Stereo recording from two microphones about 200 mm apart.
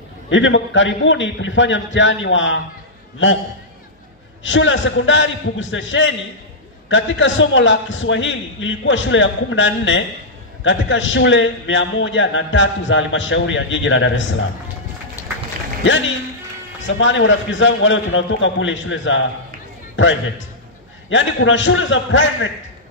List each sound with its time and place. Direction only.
0.3 s a man's voice: 70° left (ahead or behind)
4.4 s a man's voice: 70° left (ahead or behind)
15.2 s run: 15° left (ahead or behind)
16.8 s a man's voice: 70° left (ahead or behind)